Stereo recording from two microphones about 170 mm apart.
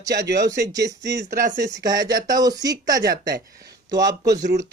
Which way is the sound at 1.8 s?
20° right (ahead or behind).